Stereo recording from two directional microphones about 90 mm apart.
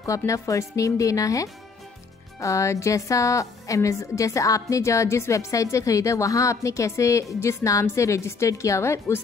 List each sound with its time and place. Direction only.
0.3 s a woman's voice: 35° left (ahead or behind)